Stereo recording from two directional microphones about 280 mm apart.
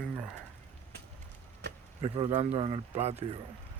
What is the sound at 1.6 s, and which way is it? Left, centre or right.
Chop, right.